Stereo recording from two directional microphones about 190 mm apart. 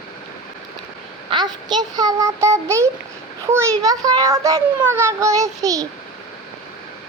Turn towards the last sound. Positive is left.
turn(degrees=-20)  # may be behind; listen again after turning